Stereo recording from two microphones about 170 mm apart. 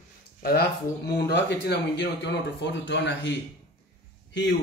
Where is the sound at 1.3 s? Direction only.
85° left.